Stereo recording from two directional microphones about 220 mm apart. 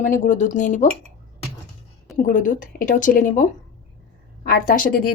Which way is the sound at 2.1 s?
35° left (ahead or behind).